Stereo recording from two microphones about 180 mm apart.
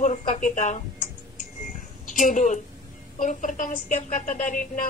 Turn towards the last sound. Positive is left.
turn(degrees=45)  # may be behind; listen again after turning